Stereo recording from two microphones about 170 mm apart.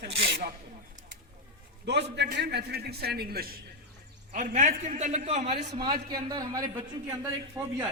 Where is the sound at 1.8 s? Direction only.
90° right; by 3.6 s 65° right (ahead or behind).